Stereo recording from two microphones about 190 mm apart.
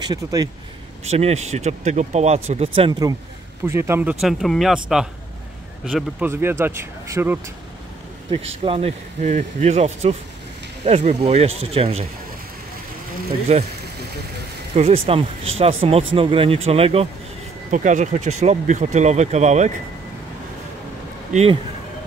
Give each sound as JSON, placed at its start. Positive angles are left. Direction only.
{"t": 0.0, "sound": "speech", "side_deg": -20}
{"t": 1.0, "sound": "speech", "side_deg": -35}
{"t": 6.2, "sound": "speech", "side_deg": -10}
{"t": 8.6, "sound": "speech", "side_deg": -30}
{"t": 13.5, "sound": "speech", "side_deg": -35}
{"t": 14.8, "sound": "speech", "side_deg": -30}
{"t": 21.3, "sound": "speech", "side_deg": -35}